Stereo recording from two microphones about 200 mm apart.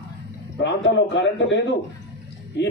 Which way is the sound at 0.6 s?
60° left (ahead or behind).